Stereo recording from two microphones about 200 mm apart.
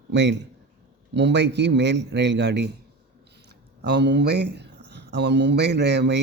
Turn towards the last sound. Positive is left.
turn(degrees=-55)  # may be behind; listen again after turning